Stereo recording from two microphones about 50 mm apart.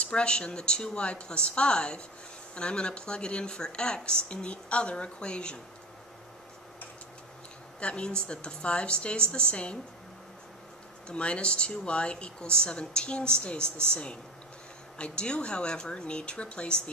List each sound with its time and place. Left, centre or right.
0.0 s speech: left
7.8 s speech: centre
11.1 s speech: left
15.0 s speech: centre